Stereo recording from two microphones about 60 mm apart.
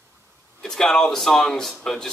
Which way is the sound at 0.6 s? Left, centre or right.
Centre.